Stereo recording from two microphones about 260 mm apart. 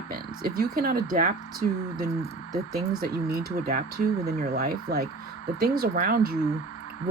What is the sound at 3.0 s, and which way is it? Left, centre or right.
Speech, right.